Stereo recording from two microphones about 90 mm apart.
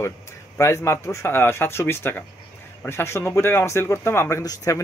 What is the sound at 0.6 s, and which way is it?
Speech, 35° left (ahead or behind).